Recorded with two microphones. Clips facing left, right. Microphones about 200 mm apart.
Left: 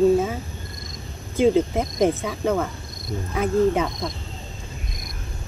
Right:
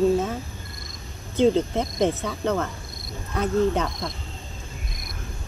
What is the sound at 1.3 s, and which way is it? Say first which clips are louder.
Speech: left 1 dB; 10° left (ahead or behind).